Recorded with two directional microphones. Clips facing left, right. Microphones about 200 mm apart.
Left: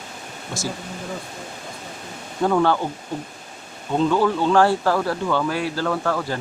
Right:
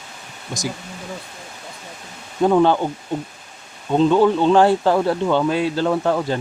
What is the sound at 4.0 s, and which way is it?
Speech, 20° right (ahead or behind).